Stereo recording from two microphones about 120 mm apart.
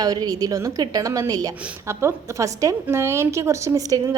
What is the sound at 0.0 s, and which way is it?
A woman's voice, 30° right (ahead or behind).